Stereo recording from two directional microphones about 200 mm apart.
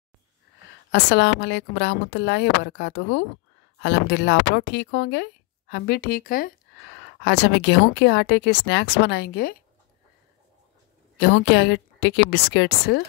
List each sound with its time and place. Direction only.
0.9 s speech: 60° left (ahead or behind)
7.2 s speech: 60° left (ahead or behind)
11.1 s speech: 50° left (ahead or behind)